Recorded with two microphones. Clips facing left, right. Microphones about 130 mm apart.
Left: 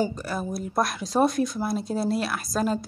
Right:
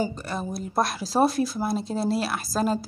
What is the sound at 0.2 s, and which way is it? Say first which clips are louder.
Speech: left 1 dB; 5° left (ahead or behind).